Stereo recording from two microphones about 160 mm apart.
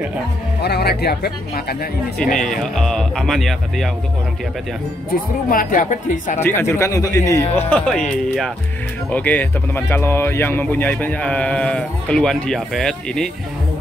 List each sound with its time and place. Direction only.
0.6 s speech: 90° left
2.3 s speech: centre (ahead or behind)
5.5 s speech: 60° left (ahead or behind)
6.4 s speech: 15° left (ahead or behind)